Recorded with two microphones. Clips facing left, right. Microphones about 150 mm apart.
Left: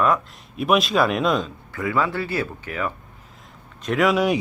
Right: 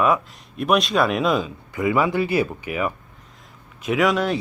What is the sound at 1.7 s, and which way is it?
Speech, 15° right (ahead or behind).